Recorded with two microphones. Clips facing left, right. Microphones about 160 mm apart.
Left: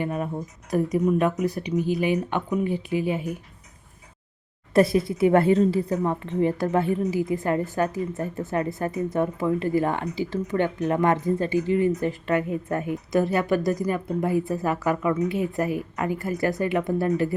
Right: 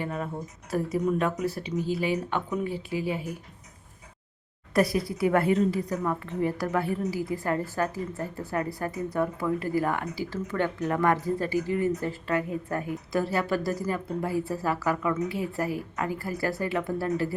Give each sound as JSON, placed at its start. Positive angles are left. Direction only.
{"t": 0.0, "sound": "speech", "side_deg": 20}
{"t": 4.7, "sound": "speech", "side_deg": 25}